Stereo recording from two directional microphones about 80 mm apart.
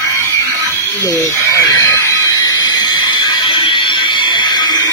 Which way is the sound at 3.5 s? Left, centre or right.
Left.